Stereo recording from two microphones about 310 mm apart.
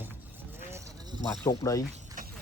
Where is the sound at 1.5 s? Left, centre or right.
Centre.